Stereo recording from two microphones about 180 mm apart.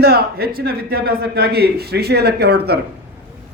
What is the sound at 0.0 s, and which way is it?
A man's voice, 60° right (ahead or behind).